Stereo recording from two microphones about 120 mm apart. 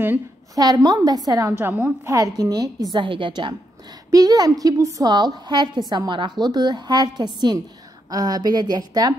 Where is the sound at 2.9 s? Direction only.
45° right (ahead or behind).